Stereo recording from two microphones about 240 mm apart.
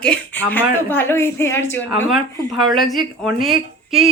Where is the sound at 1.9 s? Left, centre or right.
Centre.